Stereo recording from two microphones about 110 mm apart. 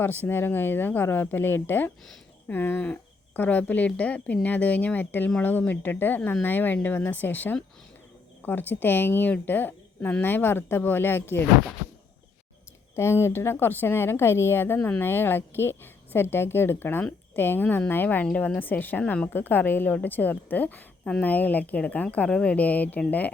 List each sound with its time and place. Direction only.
0.3 s a woman's voice: 20° left (ahead or behind)
13.0 s a woman's voice: 25° left (ahead or behind)